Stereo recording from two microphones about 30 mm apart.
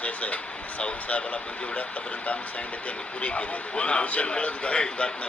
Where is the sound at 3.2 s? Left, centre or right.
Left.